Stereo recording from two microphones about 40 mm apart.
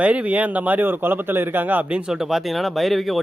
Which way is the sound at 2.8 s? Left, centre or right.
Centre.